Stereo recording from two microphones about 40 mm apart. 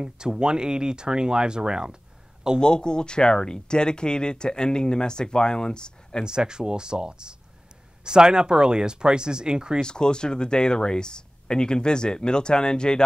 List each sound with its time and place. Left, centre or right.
0.0 s speech: centre
2.6 s speech: left
6.2 s speech: right
9.8 s speech: centre